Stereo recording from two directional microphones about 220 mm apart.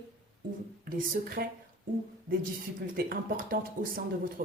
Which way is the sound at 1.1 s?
40° right (ahead or behind).